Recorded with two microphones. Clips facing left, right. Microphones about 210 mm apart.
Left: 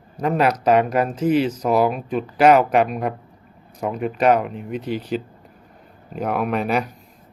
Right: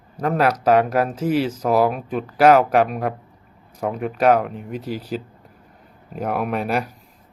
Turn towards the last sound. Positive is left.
turn(degrees=-5)  # may be behind; listen again after turning